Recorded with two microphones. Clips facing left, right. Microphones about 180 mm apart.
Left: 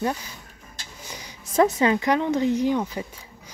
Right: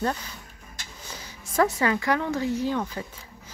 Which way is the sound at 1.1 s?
20° left (ahead or behind).